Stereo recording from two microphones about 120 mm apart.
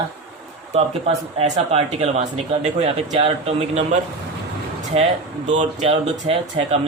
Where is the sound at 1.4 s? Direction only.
60° right (ahead or behind).